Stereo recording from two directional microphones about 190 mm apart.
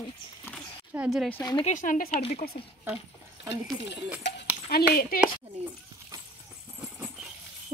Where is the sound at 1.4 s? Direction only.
20° left (ahead or behind).